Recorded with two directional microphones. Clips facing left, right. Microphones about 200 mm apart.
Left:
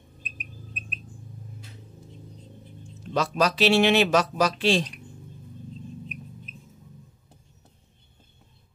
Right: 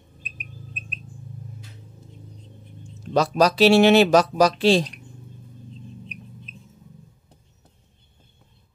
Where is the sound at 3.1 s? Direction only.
35° right (ahead or behind).